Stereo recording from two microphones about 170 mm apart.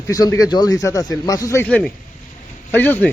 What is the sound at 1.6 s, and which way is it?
Speech, 5° left (ahead or behind).